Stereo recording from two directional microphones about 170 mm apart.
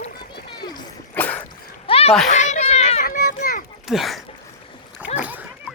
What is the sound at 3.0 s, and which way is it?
Children playing, 55° left (ahead or behind).